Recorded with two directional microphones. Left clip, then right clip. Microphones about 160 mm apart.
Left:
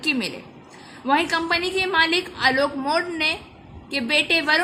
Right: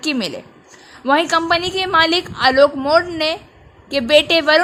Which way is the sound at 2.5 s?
30° right (ahead or behind).